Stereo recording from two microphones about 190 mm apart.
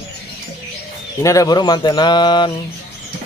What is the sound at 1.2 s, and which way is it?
Speech, 15° left (ahead or behind).